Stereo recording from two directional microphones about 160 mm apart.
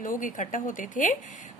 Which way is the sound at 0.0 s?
55° left (ahead or behind).